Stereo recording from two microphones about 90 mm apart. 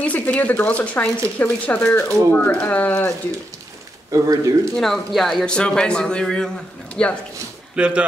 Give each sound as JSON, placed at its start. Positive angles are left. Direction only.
{"t": 0.0, "sound": "a man's voice", "side_deg": 15}
{"t": 4.1, "sound": "speech", "side_deg": -40}
{"t": 4.7, "sound": "a man's voice", "side_deg": 5}
{"t": 7.7, "sound": "speech", "side_deg": -10}